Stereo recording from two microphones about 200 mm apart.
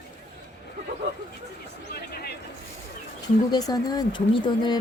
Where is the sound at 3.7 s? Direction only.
20° left (ahead or behind).